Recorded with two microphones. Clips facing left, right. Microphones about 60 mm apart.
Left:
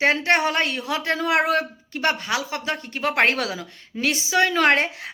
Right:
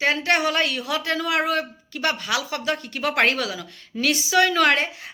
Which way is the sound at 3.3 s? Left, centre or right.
Left.